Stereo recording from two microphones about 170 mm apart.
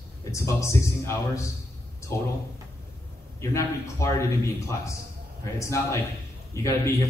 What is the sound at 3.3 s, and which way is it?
A man's voice, 15° left (ahead or behind).